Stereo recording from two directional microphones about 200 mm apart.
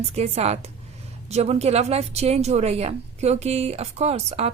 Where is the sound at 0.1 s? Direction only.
30° right (ahead or behind).